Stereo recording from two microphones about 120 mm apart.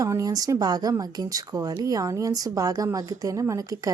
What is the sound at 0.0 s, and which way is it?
Speech, 25° right (ahead or behind).